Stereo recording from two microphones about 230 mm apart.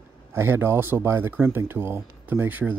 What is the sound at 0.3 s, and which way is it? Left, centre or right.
Speech, centre.